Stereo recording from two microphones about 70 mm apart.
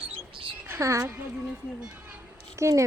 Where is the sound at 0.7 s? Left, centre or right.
Right.